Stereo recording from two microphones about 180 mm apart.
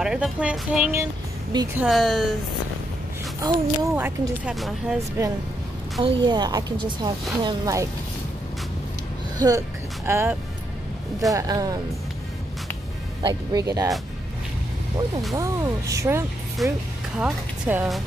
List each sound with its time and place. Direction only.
0.0 s a woman's voice: 5° right (ahead or behind)
3.3 s speech: 15° right (ahead or behind)
4.6 s a woman's voice: centre (ahead or behind)
6.0 s speech: 25° right (ahead or behind)
9.4 s speech: 20° right (ahead or behind)
11.3 s speech: 20° right (ahead or behind)
13.2 s speech: 25° right (ahead or behind)
15.3 s speech: 15° right (ahead or behind)
16.6 s a woman's voice: centre (ahead or behind)